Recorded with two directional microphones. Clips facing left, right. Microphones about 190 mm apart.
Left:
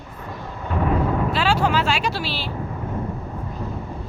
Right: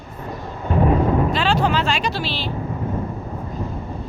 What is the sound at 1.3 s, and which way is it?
Speech, 10° left (ahead or behind).